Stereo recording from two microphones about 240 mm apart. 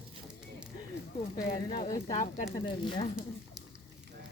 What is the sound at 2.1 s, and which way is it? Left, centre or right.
Speech, left.